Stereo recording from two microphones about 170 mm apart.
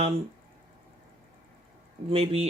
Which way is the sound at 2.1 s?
35° right (ahead or behind).